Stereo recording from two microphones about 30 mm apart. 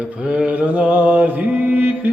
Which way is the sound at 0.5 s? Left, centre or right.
Right.